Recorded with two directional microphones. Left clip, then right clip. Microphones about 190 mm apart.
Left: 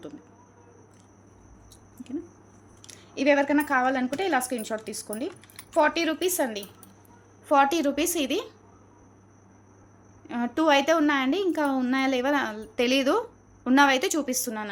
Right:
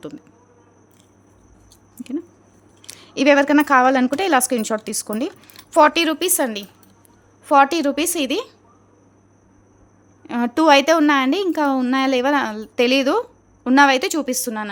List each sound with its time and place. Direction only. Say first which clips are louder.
2.8 s a woman's voice: right 7 dB; 50° right (ahead or behind)
10.2 s a woman's voice: right 8 dB; 45° right (ahead or behind)